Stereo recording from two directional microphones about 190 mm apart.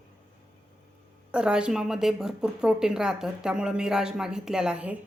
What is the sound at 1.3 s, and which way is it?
Speech, 5° right (ahead or behind).